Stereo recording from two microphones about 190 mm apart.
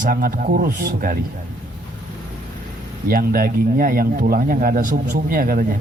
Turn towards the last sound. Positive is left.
turn(degrees=-45)  # may be behind; listen again after turning